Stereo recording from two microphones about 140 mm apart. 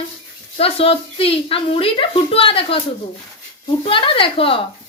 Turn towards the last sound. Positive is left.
turn(degrees=40)  # may be behind; listen again after turning